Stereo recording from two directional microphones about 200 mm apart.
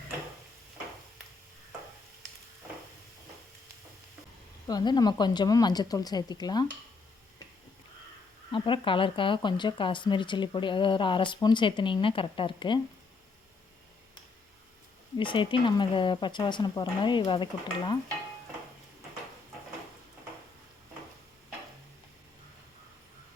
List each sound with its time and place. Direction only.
4.6 s speech: 20° left (ahead or behind)
8.5 s speech: 25° left (ahead or behind)
15.2 s speech: 25° left (ahead or behind)